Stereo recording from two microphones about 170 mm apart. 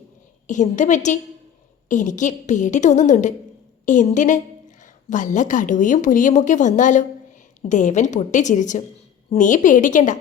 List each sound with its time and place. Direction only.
0.4 s a woman's voice: 45° left (ahead or behind)